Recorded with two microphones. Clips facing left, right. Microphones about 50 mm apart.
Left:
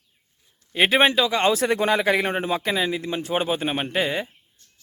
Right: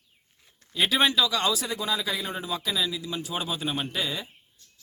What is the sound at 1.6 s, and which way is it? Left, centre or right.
Speech, left.